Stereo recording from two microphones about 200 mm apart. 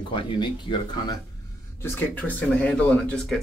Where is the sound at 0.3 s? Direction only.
25° left (ahead or behind).